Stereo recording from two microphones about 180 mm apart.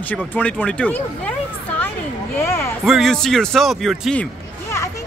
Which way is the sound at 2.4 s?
15° left (ahead or behind).